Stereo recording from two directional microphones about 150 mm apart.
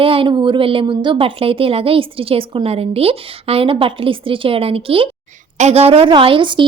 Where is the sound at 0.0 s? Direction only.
35° right (ahead or behind).